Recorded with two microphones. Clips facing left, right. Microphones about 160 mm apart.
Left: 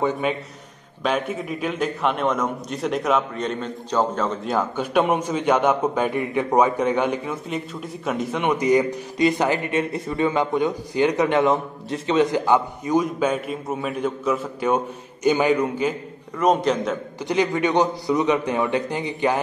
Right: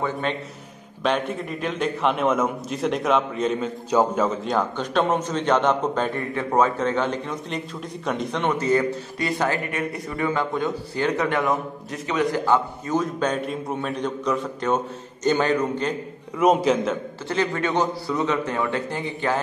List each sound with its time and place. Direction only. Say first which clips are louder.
0.3 s a man's voice: left 2 dB; 5° left (ahead or behind)
16.3 s a man's voice: right 1 dB; 5° right (ahead or behind)
17.3 s a man's voice: left 3 dB; 15° left (ahead or behind)